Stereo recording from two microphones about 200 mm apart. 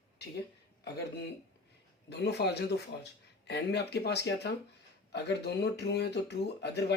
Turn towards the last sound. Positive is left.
turn(degrees=55)  # may be behind; listen again after turning